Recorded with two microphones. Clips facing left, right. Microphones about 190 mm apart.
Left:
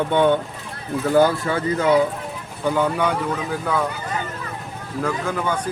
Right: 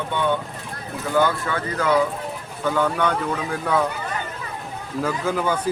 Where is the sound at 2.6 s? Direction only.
10° left (ahead or behind).